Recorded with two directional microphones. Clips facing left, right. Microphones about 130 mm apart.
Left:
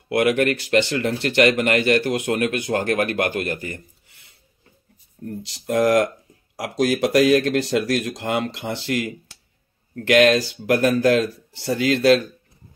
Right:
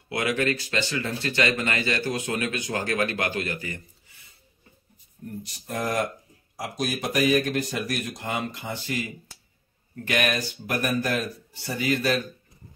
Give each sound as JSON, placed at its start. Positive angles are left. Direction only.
{"t": 0.1, "sound": "speech", "side_deg": 60}
{"t": 5.4, "sound": "speech", "side_deg": 85}
{"t": 10.0, "sound": "speech", "side_deg": 85}